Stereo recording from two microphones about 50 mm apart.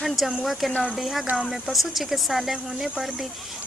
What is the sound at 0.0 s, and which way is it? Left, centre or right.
Speech, centre.